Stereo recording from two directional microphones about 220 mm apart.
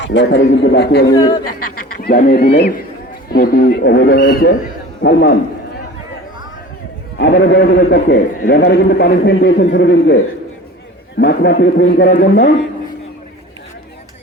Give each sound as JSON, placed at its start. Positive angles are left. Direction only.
{"t": 0.0, "sound": "a man's voice", "side_deg": 55}
{"t": 1.1, "sound": "speech", "side_deg": 20}
{"t": 2.0, "sound": "a man's voice", "side_deg": 45}
{"t": 7.2, "sound": "a man's voice", "side_deg": 50}
{"t": 11.2, "sound": "a man's voice", "side_deg": 50}